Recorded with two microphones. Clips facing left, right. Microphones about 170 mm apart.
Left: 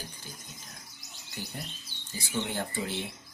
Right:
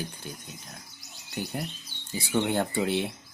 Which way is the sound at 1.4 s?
60° right (ahead or behind).